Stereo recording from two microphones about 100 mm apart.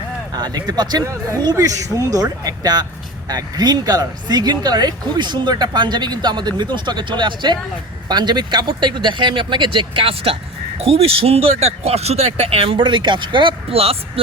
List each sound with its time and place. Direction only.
0.3 s speech: 45° right (ahead or behind); by 13.9 s 75° right (ahead or behind)